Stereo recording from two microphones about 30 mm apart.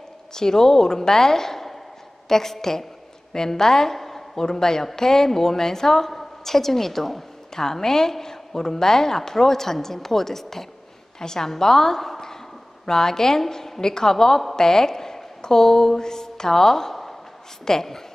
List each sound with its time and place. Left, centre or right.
0.3 s a woman's voice: centre